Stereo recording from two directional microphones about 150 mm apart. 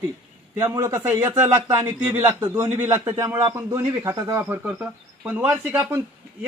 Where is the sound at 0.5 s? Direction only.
20° right (ahead or behind).